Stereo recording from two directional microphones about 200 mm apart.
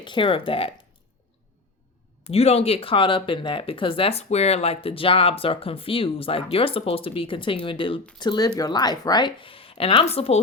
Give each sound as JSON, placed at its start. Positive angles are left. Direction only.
{"t": 0.0, "sound": "speech", "side_deg": 25}
{"t": 2.3, "sound": "speech", "side_deg": 30}